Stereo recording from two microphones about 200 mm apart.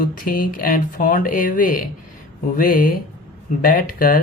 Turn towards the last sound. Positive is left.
turn(degrees=45)  # may be behind; listen again after turning